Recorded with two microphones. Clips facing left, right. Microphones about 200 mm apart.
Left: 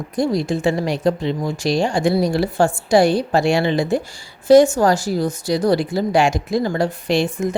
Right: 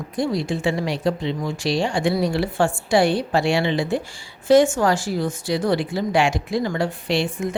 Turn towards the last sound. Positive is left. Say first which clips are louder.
# left 4 dB
turn(degrees=45)  # may be behind; listen again after turning